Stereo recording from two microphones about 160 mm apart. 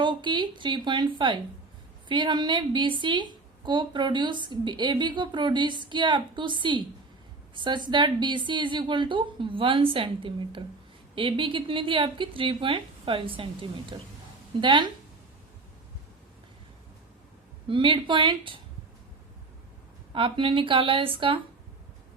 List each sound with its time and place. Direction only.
0.0 s a woman's voice: 30° right (ahead or behind)
17.7 s a woman's voice: 30° right (ahead or behind)
20.1 s a woman's voice: 35° right (ahead or behind)